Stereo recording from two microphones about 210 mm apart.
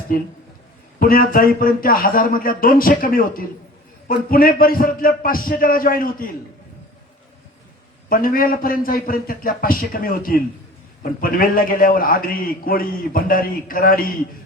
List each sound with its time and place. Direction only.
0.1 s a man's voice: 40° left (ahead or behind)
8.1 s a man's voice: 45° left (ahead or behind)